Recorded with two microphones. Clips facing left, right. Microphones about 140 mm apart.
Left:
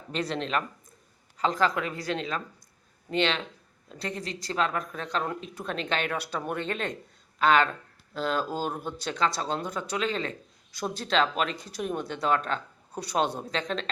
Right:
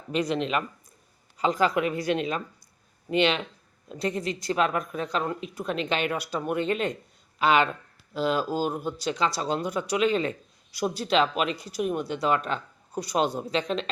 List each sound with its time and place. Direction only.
0.1 s speech: 10° right (ahead or behind)